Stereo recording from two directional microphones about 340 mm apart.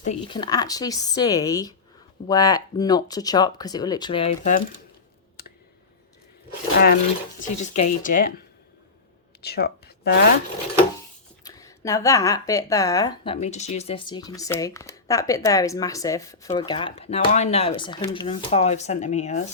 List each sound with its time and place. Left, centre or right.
0.0 s speech: centre
6.7 s speech: left
9.4 s speech: left
11.4 s speech: centre